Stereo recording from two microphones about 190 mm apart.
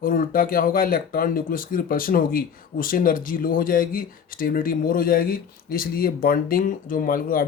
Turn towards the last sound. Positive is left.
turn(degrees=50)  # may be behind; listen again after turning